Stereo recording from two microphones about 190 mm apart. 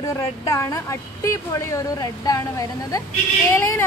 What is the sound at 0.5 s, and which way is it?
A woman's voice, 15° left (ahead or behind).